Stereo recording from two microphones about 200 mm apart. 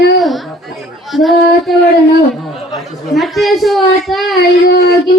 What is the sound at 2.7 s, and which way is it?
Chatter, centre (ahead or behind).